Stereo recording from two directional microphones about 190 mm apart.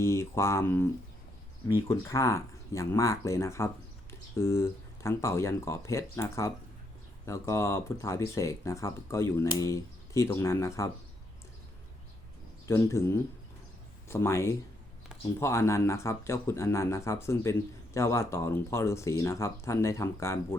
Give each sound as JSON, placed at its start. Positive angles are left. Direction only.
{"t": 0.0, "sound": "speech", "side_deg": 15}
{"t": 1.9, "sound": "speech", "side_deg": 15}
{"t": 12.6, "sound": "speech", "side_deg": 15}